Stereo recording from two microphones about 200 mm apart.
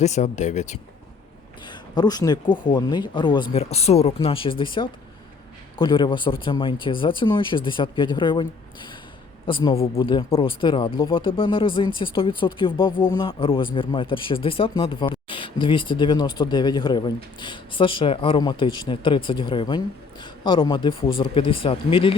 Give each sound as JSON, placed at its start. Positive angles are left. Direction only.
{"t": 0.0, "sound": "speech", "side_deg": 35}
{"t": 1.6, "sound": "speech", "side_deg": 20}